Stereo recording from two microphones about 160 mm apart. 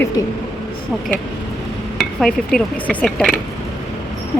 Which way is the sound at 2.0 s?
Centre (ahead or behind).